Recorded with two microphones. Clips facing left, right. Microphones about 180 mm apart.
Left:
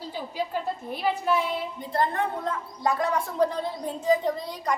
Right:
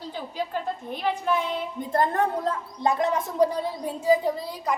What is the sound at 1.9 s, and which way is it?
Speech, 45° right (ahead or behind).